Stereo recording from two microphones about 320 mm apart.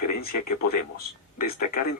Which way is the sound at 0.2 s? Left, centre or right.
Left.